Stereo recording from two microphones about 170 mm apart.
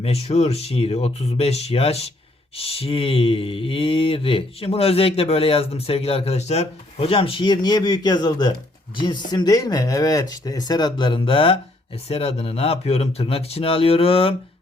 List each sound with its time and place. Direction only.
0.0 s speech: 40° left (ahead or behind)